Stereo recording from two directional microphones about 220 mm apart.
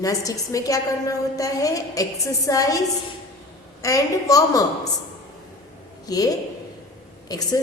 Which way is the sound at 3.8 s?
15° left (ahead or behind).